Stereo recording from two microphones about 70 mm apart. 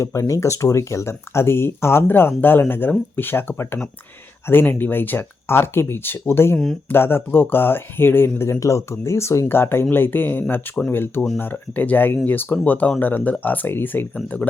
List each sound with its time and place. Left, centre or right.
0.0 s speech: left
8.5 s speech: left